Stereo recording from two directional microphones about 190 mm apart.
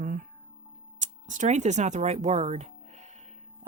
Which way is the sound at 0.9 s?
40° right (ahead or behind).